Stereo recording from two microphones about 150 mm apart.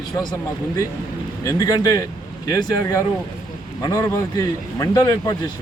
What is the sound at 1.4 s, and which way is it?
Speech, 25° left (ahead or behind).